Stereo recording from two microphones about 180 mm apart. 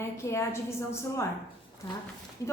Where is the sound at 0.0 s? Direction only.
15° left (ahead or behind).